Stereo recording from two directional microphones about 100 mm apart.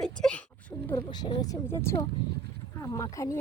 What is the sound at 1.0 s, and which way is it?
Speech, 45° left (ahead or behind).